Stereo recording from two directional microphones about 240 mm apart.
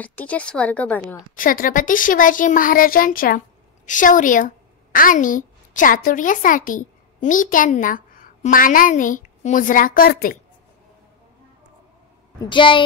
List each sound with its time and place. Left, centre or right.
0.0 s speech: centre
1.3 s a woman's voice: left
12.4 s a woman's voice: centre